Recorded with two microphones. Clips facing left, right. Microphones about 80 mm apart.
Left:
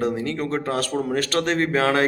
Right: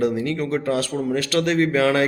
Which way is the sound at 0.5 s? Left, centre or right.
Left.